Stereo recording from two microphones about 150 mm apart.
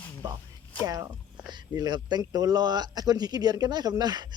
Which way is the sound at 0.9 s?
20° right (ahead or behind).